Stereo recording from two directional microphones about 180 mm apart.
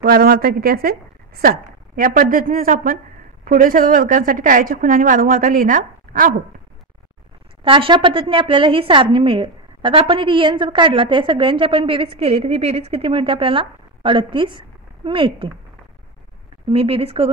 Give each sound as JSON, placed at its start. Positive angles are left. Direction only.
{"t": 0.0, "sound": "a woman's voice", "side_deg": -60}
{"t": 7.6, "sound": "a woman's voice", "side_deg": -30}
{"t": 16.6, "sound": "speech", "side_deg": -30}